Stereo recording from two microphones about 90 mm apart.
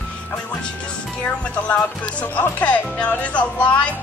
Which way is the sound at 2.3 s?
15° left (ahead or behind).